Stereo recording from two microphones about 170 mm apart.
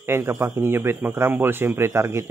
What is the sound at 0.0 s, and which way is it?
Speech, 15° right (ahead or behind).